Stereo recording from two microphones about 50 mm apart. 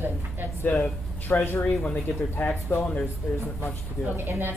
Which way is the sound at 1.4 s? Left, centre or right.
Left.